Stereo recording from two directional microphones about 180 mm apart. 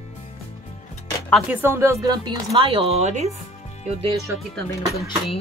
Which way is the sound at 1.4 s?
15° right (ahead or behind).